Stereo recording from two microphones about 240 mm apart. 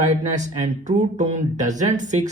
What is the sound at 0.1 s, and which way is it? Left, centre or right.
Speech, right.